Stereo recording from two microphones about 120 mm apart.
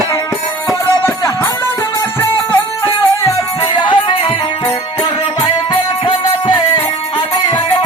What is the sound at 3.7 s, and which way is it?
Music, 40° left (ahead or behind).